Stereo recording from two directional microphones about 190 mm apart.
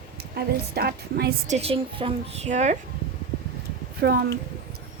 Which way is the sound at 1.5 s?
30° right (ahead or behind).